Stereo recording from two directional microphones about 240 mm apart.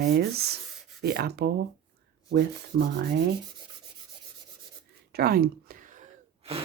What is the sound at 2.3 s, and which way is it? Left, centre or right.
Sanding, right.